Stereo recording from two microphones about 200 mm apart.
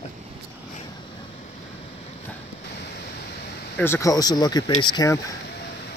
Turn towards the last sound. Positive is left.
turn(degrees=20)  # may be behind; listen again after turning